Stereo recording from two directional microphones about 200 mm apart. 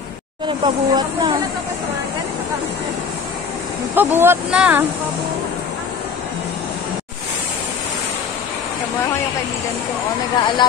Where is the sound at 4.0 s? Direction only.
10° right (ahead or behind).